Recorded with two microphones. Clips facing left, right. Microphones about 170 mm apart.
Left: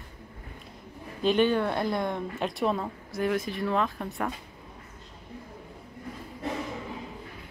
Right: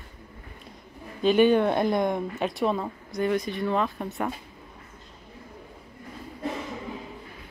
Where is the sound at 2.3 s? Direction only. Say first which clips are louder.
Right 2 dB; centre (ahead or behind).